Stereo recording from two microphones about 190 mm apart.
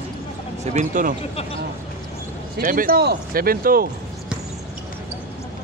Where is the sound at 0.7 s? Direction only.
40° right (ahead or behind).